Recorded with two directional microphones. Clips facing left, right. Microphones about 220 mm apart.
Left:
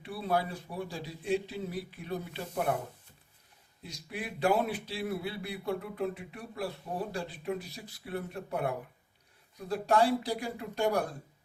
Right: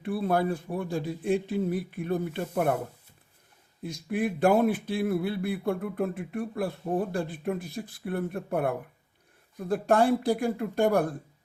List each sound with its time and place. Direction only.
0.0 s speech: 50° right (ahead or behind)
3.8 s speech: 50° right (ahead or behind)